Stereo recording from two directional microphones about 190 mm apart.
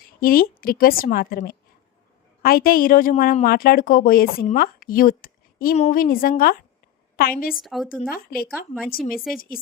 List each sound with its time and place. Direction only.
0.0 s a woman's voice: 50° left (ahead or behind)
5.7 s speech: 35° left (ahead or behind)
6.0 s a woman's voice: 50° left (ahead or behind)
7.5 s a woman's voice: centre (ahead or behind)
8.1 s a woman's voice: 50° left (ahead or behind)
9.0 s a woman's voice: centre (ahead or behind)
9.3 s a woman's voice: 50° left (ahead or behind)